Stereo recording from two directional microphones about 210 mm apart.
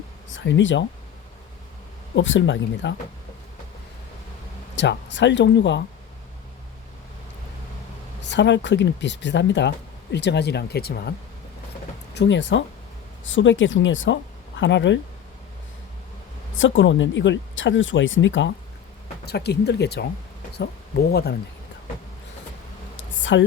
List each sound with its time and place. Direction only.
0.3 s speech: 60° left (ahead or behind)
2.1 s speech: 60° left (ahead or behind)
4.7 s speech: 55° left (ahead or behind)
8.2 s speech: 55° left (ahead or behind)
12.1 s speech: 55° left (ahead or behind)
16.6 s speech: 65° left (ahead or behind)
19.2 s speech: 50° left (ahead or behind)
21.1 s speech: 50° left (ahead or behind)
23.2 s a woman's voice: 60° left (ahead or behind)